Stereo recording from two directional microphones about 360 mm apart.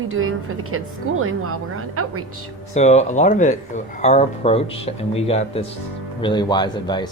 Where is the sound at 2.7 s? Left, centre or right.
Centre.